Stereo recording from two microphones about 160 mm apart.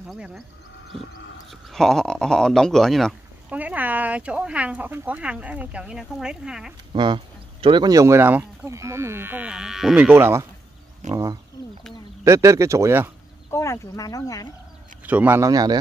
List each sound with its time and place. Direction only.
0.1 s speech: centre (ahead or behind)
6.9 s speech: 30° right (ahead or behind); by 10.4 s 15° right (ahead or behind)
11.0 s speech: 50° right (ahead or behind)
12.3 s speech: 20° right (ahead or behind)
13.5 s speech: 20° left (ahead or behind)
15.0 s speech: 10° right (ahead or behind)